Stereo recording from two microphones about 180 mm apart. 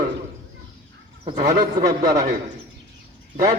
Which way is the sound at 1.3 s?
45° right (ahead or behind).